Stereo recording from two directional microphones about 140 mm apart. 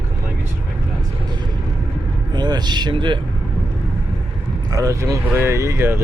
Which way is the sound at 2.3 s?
30° right (ahead or behind).